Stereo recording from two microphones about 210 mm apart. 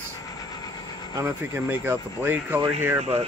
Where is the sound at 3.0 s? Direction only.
30° right (ahead or behind).